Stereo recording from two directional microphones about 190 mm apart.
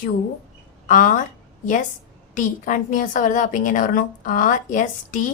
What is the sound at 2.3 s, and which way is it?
A woman's voice, 45° left (ahead or behind).